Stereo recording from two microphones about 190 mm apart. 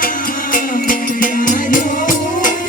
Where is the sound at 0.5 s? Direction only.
45° left (ahead or behind).